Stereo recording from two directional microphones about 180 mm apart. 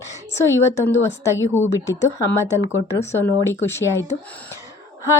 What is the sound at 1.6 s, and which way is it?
Speech, 20° left (ahead or behind).